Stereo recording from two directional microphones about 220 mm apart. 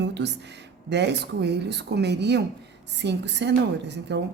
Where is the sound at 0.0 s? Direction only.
50° right (ahead or behind).